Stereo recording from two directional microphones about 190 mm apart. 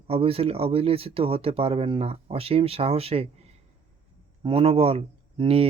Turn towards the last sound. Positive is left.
turn(degrees=-30)  # may be behind; listen again after turning